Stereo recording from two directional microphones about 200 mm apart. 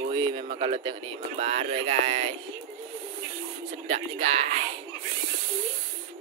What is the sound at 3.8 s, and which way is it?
Speech, 30° right (ahead or behind).